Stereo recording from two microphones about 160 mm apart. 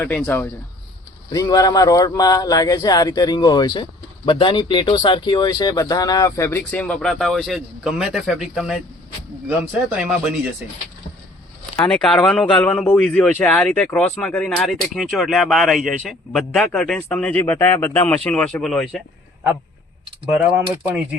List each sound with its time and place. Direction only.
0.0 s speech: 10° left (ahead or behind)
1.3 s a man's voice: 20° left (ahead or behind); by 10.3 s 5° right (ahead or behind)
11.9 s speech: 5° left (ahead or behind)
20.6 s a man's voice: 10° right (ahead or behind)